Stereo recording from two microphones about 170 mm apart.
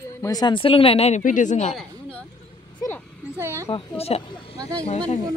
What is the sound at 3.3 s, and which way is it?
Speech, 15° right (ahead or behind).